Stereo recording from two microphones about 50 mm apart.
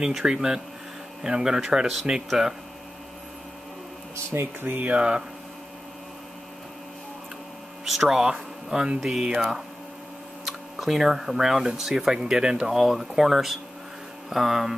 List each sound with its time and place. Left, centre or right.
0.0 s speech: centre
4.3 s speech: right
4.9 s hum: centre
7.8 s speech: centre
10.4 s speech: centre
12.7 s speech: centre